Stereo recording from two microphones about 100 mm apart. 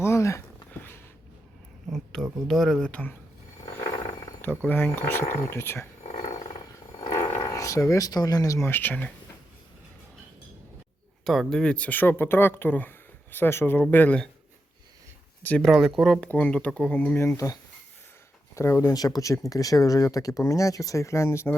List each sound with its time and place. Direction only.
0.0 s a sound: 30° left (ahead or behind)
1.9 s speech: 5° left (ahead or behind)
2.9 s speech: 15° left (ahead or behind)
4.4 s speech: 15° left (ahead or behind)
6.0 s wild animals: 90° left
7.3 s speech: 35° left (ahead or behind)
8.7 s speech: 20° left (ahead or behind)
11.3 s speech: 5° left (ahead or behind)
15.6 s speech: centre (ahead or behind)
16.2 s speech: 15° left (ahead or behind)
18.9 s speech: 40° left (ahead or behind)